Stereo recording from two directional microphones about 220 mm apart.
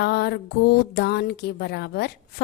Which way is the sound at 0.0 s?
45° left (ahead or behind).